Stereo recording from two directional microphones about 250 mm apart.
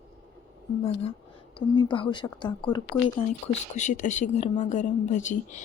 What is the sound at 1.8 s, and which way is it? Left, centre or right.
Speech, centre.